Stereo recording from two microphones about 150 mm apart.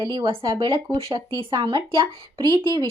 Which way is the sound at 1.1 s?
25° right (ahead or behind).